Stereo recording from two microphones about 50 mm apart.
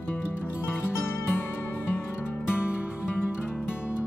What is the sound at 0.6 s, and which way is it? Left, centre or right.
Music, left.